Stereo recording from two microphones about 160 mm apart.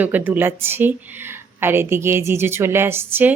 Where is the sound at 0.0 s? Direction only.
10° right (ahead or behind).